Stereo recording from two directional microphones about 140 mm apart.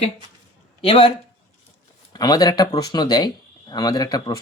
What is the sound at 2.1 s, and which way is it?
Speech, 30° left (ahead or behind).